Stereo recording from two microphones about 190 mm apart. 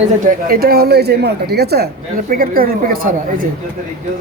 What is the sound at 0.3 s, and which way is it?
A woman's voice, 50° right (ahead or behind).